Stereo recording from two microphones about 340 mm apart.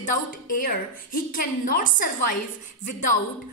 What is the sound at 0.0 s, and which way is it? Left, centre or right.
A woman's voice, left.